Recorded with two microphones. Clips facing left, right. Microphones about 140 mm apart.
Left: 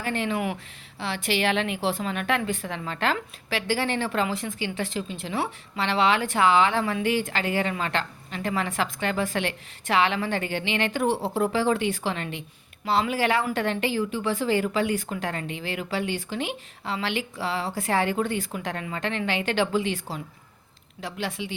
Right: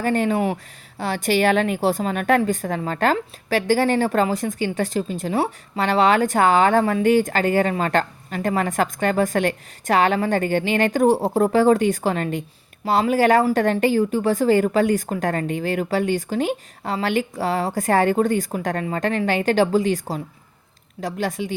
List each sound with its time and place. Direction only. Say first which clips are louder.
0.0 s a woman's voice: right 7 dB; 45° right (ahead or behind)